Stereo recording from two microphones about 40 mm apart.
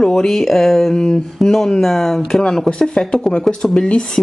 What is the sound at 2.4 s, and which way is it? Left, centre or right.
Speech, centre.